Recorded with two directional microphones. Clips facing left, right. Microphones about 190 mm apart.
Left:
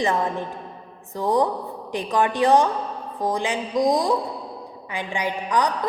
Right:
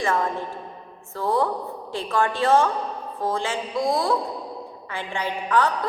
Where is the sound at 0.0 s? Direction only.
20° left (ahead or behind).